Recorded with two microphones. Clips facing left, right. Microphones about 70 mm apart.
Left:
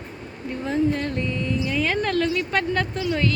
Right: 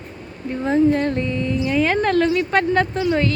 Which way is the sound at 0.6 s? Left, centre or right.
Right.